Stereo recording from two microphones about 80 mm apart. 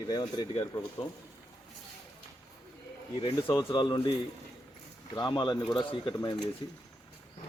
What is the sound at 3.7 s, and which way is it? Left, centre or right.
Speech, left.